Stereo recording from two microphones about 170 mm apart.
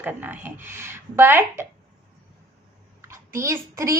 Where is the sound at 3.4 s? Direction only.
15° right (ahead or behind).